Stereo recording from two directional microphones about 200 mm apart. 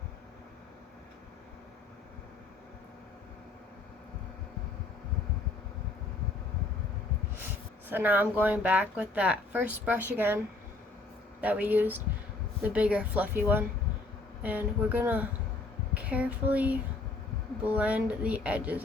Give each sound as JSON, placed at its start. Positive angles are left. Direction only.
{"t": 7.9, "sound": "speech", "side_deg": -10}
{"t": 16.0, "sound": "a sound", "side_deg": -5}
{"t": 17.7, "sound": "speech", "side_deg": -5}